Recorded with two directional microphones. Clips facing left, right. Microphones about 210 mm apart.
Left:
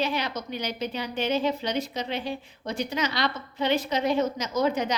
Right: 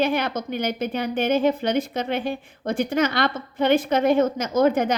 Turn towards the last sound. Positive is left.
turn(degrees=-55)  # may be behind; listen again after turning